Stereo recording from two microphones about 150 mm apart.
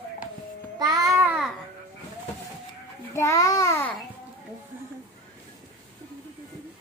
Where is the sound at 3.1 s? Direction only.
20° left (ahead or behind).